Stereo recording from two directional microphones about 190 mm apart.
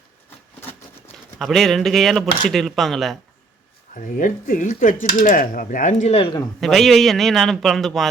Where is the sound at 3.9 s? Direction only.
40° left (ahead or behind).